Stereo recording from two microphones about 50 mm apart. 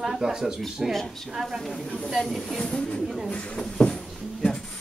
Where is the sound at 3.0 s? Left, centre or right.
Centre.